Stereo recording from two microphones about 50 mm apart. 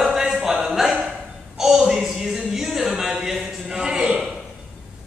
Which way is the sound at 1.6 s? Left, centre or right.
Centre.